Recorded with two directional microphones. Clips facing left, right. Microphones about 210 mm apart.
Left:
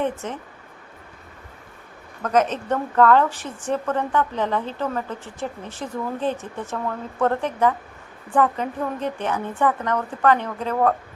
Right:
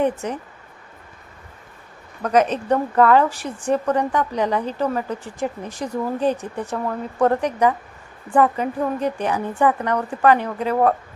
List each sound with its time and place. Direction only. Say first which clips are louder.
2.2 s a woman's voice: right 2 dB; 15° right (ahead or behind)
5.8 s speech: right 4 dB; 40° right (ahead or behind)
6.3 s a woman's voice: right 3 dB; 15° right (ahead or behind)